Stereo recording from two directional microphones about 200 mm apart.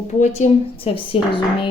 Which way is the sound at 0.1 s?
35° left (ahead or behind).